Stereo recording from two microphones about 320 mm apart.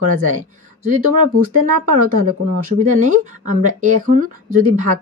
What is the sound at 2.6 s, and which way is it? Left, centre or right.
Speech, right.